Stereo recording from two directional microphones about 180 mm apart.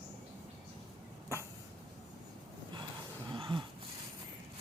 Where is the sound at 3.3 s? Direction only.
25° right (ahead or behind).